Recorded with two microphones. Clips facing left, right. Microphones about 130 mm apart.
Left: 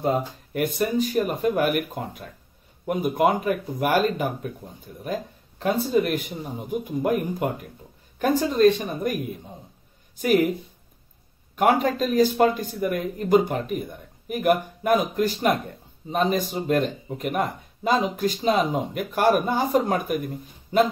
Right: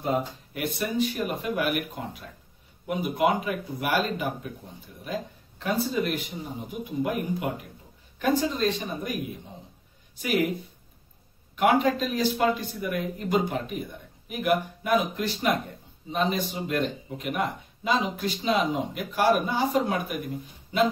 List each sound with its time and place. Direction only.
0.0 s a man's voice: 45° left (ahead or behind)
11.5 s a man's voice: 45° left (ahead or behind)